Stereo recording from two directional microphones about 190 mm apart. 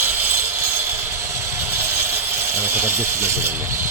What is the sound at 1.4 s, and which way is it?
Speech, 15° right (ahead or behind).